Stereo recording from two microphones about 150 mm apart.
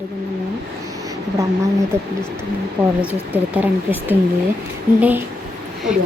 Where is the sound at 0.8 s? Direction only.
25° right (ahead or behind).